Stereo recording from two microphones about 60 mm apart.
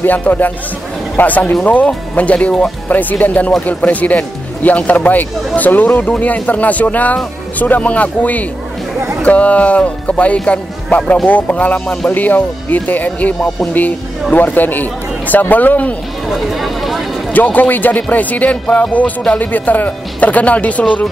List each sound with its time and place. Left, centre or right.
0.0 s speech: left
14.3 s speech: left
16.3 s speech: centre
17.3 s speech: left